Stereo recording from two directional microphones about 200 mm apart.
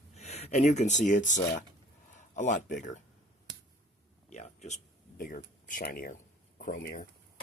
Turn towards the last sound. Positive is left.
turn(degrees=45)  # may be behind; listen again after turning